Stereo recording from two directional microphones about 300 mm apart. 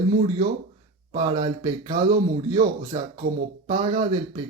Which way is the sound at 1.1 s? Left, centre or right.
Centre.